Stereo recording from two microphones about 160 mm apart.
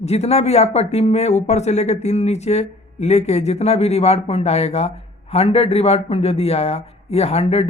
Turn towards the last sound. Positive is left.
turn(degrees=40)  # may be behind; listen again after turning